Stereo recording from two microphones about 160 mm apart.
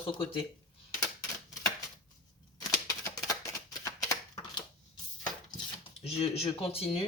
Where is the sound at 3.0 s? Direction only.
20° left (ahead or behind).